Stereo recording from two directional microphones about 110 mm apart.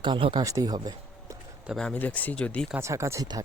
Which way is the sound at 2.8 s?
25° right (ahead or behind).